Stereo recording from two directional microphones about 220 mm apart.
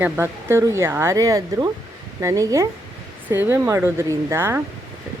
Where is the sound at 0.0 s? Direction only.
10° right (ahead or behind).